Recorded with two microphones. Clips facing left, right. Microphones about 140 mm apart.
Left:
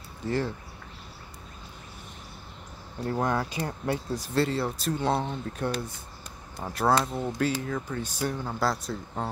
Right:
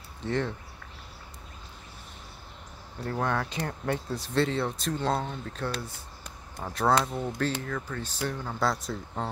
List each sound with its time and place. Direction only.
0.2 s speech: 5° left (ahead or behind)
3.1 s speech: 15° left (ahead or behind)
6.6 s speech: 5° left (ahead or behind)